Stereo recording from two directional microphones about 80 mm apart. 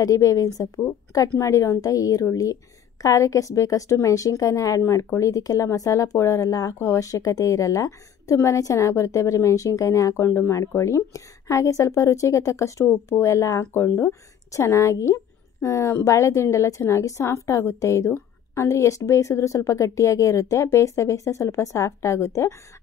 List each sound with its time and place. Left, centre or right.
0.0 s a woman's voice: left